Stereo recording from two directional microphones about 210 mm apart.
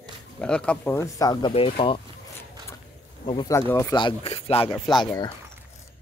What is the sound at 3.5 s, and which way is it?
Speech, 10° left (ahead or behind).